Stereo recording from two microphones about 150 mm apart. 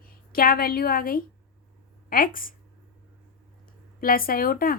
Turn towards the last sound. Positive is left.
turn(degrees=75)  # may be behind; listen again after turning